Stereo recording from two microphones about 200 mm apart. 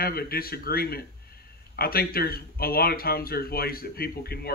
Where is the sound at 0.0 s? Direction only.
50° left (ahead or behind).